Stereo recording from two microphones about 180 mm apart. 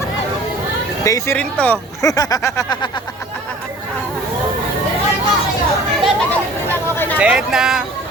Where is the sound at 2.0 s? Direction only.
20° left (ahead or behind).